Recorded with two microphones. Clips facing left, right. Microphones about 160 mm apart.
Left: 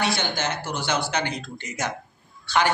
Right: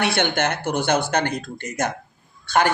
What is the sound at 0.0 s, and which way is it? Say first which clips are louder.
A man's voice: right 4 dB; 60° right (ahead or behind).